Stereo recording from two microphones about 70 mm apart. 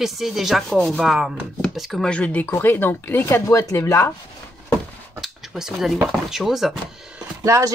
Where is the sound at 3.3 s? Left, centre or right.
Left.